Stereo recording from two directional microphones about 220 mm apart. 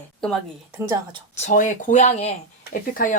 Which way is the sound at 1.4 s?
35° left (ahead or behind).